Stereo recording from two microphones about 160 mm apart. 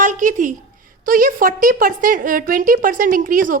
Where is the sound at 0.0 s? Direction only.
50° right (ahead or behind).